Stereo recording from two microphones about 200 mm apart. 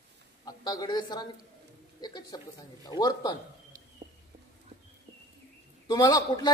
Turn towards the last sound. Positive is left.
turn(degrees=20)  # may be behind; listen again after turning